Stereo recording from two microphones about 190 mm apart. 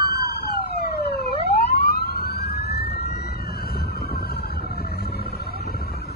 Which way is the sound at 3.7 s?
55° left (ahead or behind).